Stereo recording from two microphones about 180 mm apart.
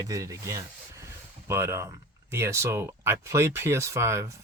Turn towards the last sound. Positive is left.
turn(degrees=-15)  # may be behind; listen again after turning